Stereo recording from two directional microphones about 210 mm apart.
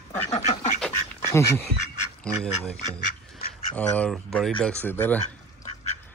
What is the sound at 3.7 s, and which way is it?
Speech, 5° left (ahead or behind).